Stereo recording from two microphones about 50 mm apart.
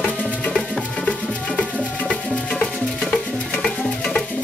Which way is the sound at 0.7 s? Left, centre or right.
Centre.